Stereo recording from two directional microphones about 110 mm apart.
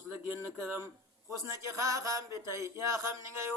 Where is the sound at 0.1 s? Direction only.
20° right (ahead or behind).